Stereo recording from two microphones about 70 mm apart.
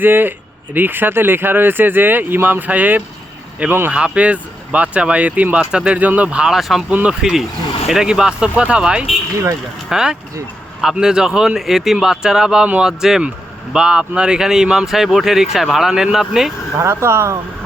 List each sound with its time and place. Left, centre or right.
0.0 s speech: right
3.9 s speech: centre
6.5 s speech: centre
16.7 s speech: right